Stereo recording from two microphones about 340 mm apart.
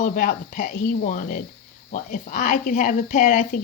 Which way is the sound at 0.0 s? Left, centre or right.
Left.